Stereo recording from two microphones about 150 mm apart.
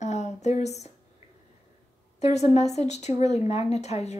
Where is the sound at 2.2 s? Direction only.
45° left (ahead or behind).